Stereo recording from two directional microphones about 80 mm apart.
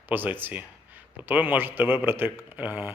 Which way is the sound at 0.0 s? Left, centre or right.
Right.